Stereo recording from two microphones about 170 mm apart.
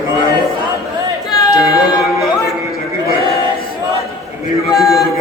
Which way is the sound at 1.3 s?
25° left (ahead or behind).